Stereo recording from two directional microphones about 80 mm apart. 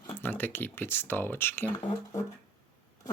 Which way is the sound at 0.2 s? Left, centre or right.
Left.